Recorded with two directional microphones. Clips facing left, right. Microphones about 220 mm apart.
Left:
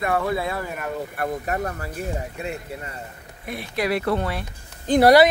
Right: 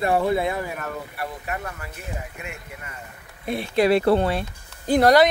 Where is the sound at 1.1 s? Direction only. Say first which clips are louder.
Left 5 dB; 40° left (ahead or behind).